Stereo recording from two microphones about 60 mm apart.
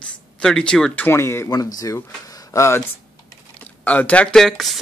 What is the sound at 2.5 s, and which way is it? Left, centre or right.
Speech, left.